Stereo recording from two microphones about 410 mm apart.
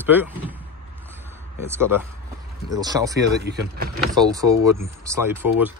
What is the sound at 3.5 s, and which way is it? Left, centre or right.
Speech, right.